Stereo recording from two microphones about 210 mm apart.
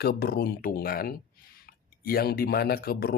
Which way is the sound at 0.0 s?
45° left (ahead or behind).